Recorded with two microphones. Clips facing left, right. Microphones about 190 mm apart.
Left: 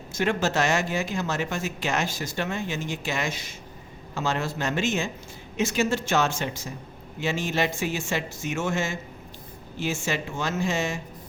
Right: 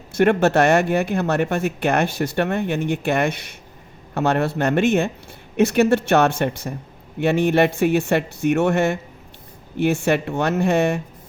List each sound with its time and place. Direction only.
0.1 s speech: 60° right (ahead or behind)